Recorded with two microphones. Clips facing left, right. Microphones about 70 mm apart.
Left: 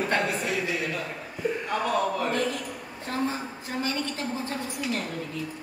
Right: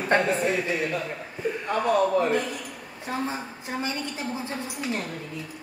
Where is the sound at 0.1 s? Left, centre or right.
Right.